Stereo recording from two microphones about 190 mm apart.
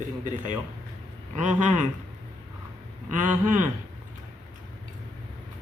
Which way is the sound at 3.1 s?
40° right (ahead or behind).